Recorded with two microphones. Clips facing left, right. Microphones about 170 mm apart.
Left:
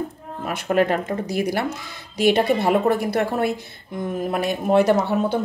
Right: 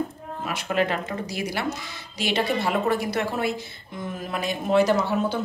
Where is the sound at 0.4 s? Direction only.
50° left (ahead or behind).